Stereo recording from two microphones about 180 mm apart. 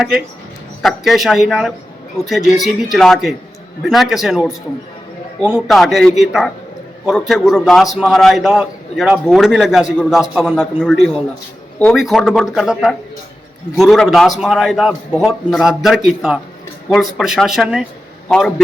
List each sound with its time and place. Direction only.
0.8 s a man's voice: centre (ahead or behind)